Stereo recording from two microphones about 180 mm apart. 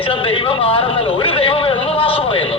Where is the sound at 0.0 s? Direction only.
30° left (ahead or behind).